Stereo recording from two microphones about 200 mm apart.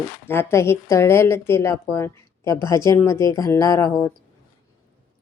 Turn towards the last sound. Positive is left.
turn(degrees=15)  # may be behind; listen again after turning